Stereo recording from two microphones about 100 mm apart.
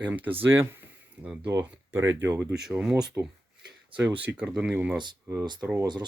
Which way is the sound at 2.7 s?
10° right (ahead or behind).